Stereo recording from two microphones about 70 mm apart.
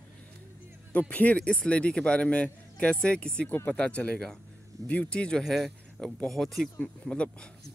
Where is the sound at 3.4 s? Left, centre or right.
Left.